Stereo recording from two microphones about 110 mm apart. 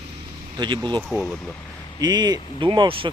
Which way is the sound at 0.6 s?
45° right (ahead or behind).